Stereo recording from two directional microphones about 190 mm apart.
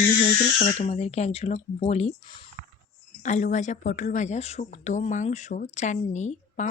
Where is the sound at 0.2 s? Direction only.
40° left (ahead or behind).